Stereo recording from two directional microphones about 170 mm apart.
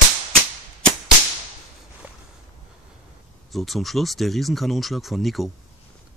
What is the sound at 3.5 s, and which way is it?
Speech, centre (ahead or behind).